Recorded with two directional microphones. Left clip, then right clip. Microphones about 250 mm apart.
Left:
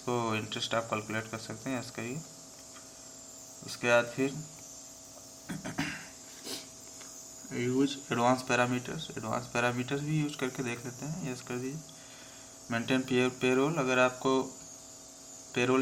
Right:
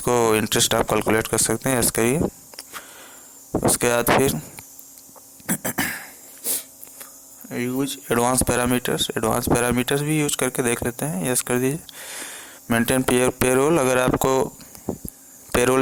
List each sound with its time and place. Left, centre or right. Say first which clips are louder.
0.0 s speech: right 14 dB; right
3.8 s speech: right 7 dB; right
5.5 s a sound: right 12 dB; right
7.5 s speech: right 5 dB; right
15.5 s speech: right 10 dB; right